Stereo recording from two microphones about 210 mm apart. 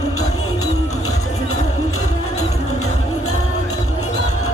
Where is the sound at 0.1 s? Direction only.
90° left.